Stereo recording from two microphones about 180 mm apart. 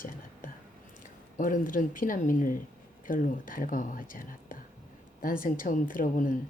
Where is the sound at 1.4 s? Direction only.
50° left (ahead or behind).